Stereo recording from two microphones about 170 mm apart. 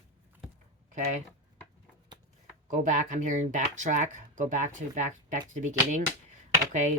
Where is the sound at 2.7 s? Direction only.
45° right (ahead or behind).